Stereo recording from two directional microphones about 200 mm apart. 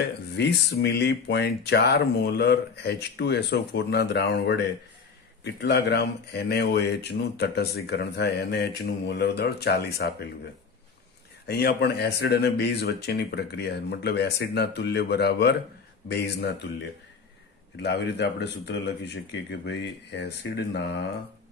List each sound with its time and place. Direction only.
0.4 s speech: 55° left (ahead or behind)
11.4 s speech: 55° left (ahead or behind)
17.8 s speech: 60° left (ahead or behind)